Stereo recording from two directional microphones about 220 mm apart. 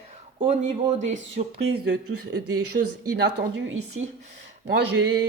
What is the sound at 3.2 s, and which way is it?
Speech, 50° right (ahead or behind).